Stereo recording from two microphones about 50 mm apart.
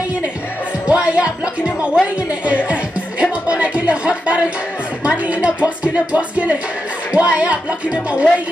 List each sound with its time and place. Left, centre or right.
0.8 s music: right
6.1 s speech: right